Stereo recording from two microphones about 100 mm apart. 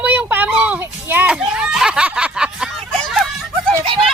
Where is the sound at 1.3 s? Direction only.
10° right (ahead or behind).